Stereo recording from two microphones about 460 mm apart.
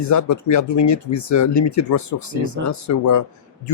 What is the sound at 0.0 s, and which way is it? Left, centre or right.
Speech, left.